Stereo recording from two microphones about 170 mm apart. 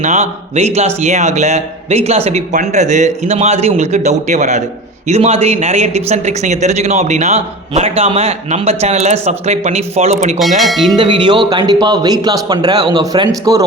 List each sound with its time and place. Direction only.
0.0 s speech: 40° right (ahead or behind)
10.6 s speech: centre (ahead or behind)
10.9 s a man's voice: 25° right (ahead or behind)